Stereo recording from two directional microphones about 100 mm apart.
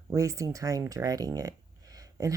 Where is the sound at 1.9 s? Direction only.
35° right (ahead or behind).